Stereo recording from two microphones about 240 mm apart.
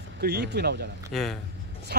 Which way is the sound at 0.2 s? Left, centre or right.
Right.